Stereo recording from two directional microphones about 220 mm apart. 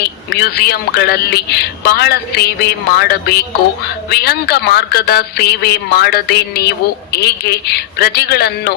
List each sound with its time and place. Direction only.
0.3 s a man's voice: 45° left (ahead or behind)